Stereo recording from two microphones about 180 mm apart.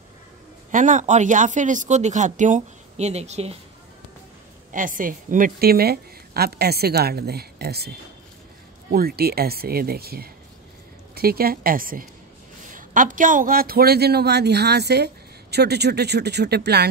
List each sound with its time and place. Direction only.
0.7 s speech: 45° right (ahead or behind)
4.7 s a man's voice: 50° right (ahead or behind)
8.9 s a man's voice: 60° right (ahead or behind)